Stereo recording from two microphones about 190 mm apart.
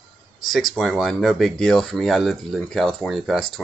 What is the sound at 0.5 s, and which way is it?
Speech, centre (ahead or behind).